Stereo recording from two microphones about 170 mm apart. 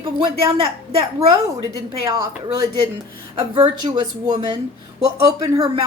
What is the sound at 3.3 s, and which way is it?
Speech, 30° right (ahead or behind).